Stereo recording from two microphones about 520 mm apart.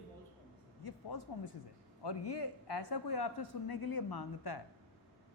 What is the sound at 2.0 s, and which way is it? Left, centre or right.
A man's voice, left.